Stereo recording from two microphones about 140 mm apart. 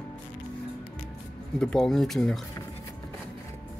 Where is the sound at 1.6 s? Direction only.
5° left (ahead or behind).